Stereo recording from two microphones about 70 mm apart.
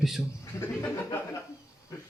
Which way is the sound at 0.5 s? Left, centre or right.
Left.